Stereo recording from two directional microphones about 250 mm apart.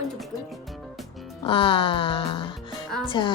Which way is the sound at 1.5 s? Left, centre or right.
Left.